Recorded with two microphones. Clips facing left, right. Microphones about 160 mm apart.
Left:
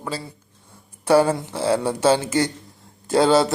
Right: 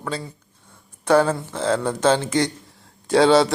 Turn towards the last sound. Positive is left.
turn(degrees=0)  # may be behind; listen again after turning